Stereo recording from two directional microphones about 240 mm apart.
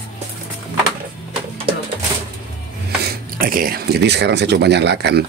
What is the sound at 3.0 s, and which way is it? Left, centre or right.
Speech, right.